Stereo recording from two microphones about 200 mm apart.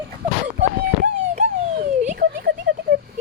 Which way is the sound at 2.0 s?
40° right (ahead or behind).